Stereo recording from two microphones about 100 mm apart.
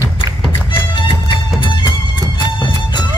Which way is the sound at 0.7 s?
55° left (ahead or behind).